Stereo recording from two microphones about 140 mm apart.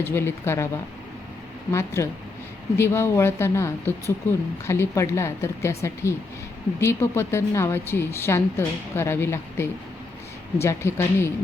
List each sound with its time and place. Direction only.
0.0 s a woman's voice: 15° left (ahead or behind)
1.7 s a woman's voice: 20° left (ahead or behind)